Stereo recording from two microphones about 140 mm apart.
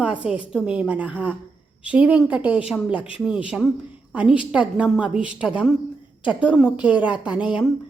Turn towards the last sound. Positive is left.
turn(degrees=-5)  # may be behind; listen again after turning